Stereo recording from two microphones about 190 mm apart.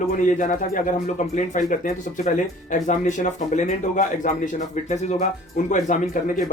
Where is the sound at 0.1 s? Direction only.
45° left (ahead or behind).